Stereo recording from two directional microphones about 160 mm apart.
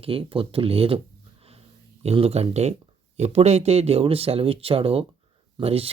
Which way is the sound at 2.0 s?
40° right (ahead or behind).